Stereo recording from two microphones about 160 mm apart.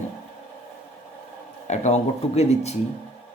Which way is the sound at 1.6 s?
45° left (ahead or behind).